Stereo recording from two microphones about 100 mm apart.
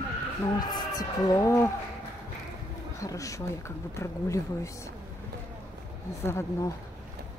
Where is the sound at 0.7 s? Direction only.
40° left (ahead or behind).